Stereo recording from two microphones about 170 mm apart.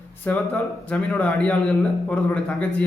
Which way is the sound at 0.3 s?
10° left (ahead or behind).